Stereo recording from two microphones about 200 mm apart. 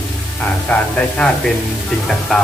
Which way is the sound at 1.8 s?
Centre (ahead or behind).